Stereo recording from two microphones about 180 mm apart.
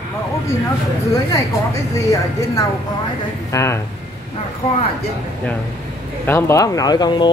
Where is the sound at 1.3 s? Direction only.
20° left (ahead or behind).